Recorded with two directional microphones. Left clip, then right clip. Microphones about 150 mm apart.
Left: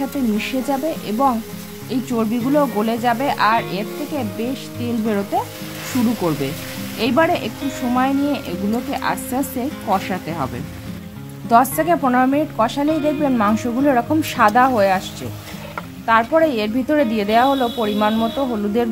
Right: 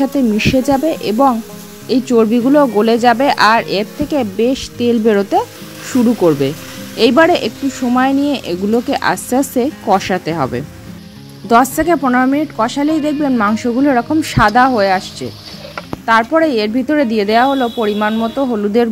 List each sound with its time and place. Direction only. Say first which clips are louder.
0.4 s a woman's voice: right 10 dB; 45° right (ahead or behind)
7.0 s a woman's voice: right 7 dB; 45° right (ahead or behind)
11.4 s a woman's voice: right 3 dB; 30° right (ahead or behind)
16.1 s a woman's voice: right 3 dB; 30° right (ahead or behind)